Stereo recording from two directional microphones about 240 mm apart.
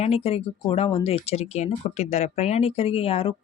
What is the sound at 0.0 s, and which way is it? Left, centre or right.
Speech, left.